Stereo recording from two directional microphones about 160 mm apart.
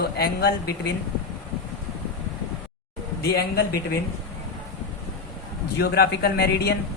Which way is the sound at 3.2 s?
90° left.